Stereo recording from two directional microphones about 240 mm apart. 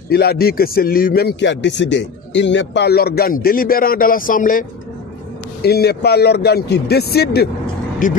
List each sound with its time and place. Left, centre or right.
0.1 s a man's voice: left